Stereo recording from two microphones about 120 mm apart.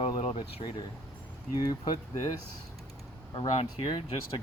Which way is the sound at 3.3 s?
40° left (ahead or behind).